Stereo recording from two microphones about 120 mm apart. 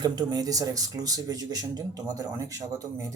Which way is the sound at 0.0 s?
35° right (ahead or behind).